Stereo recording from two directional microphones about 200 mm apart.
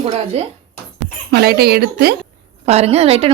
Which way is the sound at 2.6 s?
30° right (ahead or behind).